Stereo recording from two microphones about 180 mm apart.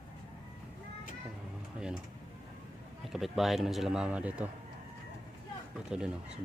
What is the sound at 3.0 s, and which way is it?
A man's voice, centre (ahead or behind).